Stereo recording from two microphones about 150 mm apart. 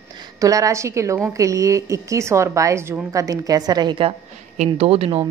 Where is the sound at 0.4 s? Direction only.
20° right (ahead or behind).